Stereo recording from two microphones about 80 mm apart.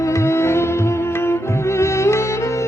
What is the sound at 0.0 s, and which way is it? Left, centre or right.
Music, left.